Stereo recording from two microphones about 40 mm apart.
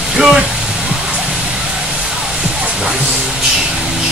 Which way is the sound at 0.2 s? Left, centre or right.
Centre.